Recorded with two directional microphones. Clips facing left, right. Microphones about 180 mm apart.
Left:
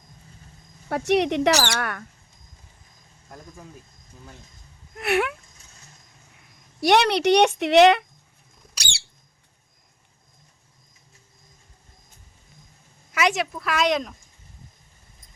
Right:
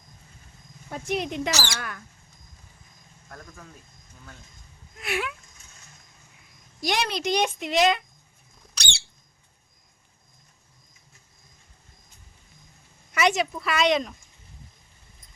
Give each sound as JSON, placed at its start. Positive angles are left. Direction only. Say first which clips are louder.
{"t": 0.9, "sound": "a woman's voice", "louder": "left 8 dB", "side_deg": 75}
{"t": 3.2, "sound": "speech", "louder": "left 2 dB", "side_deg": 20}
{"t": 4.9, "sound": "speech", "louder": "left 7 dB", "side_deg": 65}
{"t": 6.7, "sound": "a woman's voice", "louder": "left 9 dB", "side_deg": 65}
{"t": 13.1, "sound": "a woman's voice", "louder": "even", "side_deg": 0}